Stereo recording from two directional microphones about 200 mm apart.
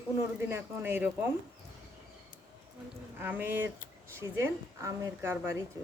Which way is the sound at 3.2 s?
10° right (ahead or behind).